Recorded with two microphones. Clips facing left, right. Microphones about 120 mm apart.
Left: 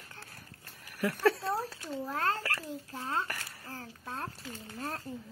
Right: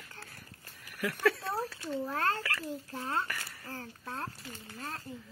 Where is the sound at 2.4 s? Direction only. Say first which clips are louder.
Even; 40° left (ahead or behind).